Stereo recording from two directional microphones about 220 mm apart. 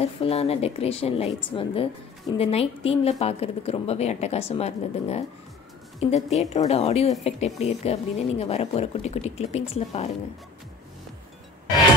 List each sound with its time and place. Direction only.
0.0 s a woman's voice: 25° left (ahead or behind)